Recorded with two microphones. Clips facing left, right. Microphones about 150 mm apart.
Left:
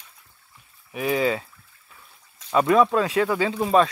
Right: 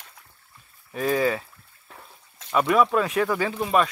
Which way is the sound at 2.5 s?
25° left (ahead or behind).